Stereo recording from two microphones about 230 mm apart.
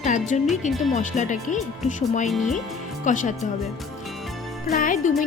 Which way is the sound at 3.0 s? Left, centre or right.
Left.